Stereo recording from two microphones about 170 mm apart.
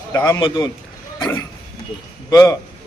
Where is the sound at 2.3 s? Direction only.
20° left (ahead or behind).